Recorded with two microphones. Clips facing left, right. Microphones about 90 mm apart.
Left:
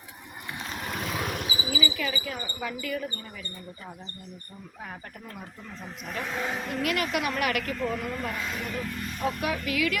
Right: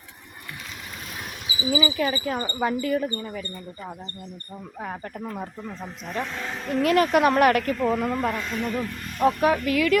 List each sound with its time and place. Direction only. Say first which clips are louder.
0.9 s vehicle: left 8 dB; 80° left
1.7 s speech: right 8 dB; 35° right (ahead or behind)
4.8 s speech: right 9 dB; 45° right (ahead or behind)
5.3 s speech: right 8 dB; 35° right (ahead or behind)
6.3 s speech: left 2 dB; 10° left (ahead or behind)
6.7 s speech: right 12 dB; 35° right (ahead or behind)
8.4 s speech: right 4 dB; centre (ahead or behind)
9.1 s speech: right 10 dB; 40° right (ahead or behind)